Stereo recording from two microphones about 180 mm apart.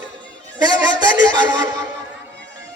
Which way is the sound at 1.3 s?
20° right (ahead or behind).